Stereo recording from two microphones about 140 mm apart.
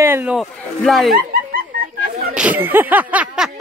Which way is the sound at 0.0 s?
15° right (ahead or behind).